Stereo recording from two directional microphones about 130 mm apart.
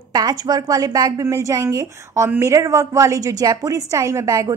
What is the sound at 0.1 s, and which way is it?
A woman's voice, 30° right (ahead or behind).